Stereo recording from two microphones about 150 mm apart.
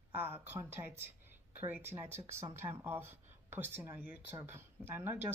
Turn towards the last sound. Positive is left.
turn(degrees=-15)  # may be behind; listen again after turning